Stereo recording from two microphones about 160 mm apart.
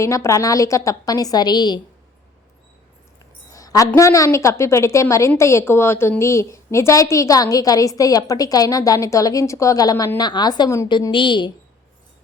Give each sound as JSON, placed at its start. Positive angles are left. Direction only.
{"t": 0.0, "sound": "a woman's voice", "side_deg": 20}
{"t": 3.5, "sound": "a woman's voice", "side_deg": 20}